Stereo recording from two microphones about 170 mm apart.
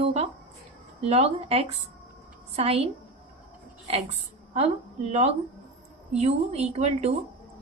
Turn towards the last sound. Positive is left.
turn(degrees=-40)  # may be behind; listen again after turning